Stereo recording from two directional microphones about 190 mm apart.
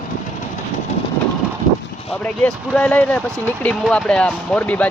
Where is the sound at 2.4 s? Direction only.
5° left (ahead or behind).